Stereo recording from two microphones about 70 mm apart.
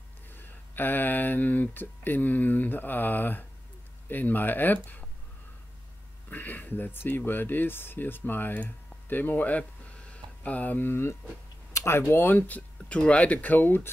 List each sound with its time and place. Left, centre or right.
0.3 s speech: left
6.3 s speech: left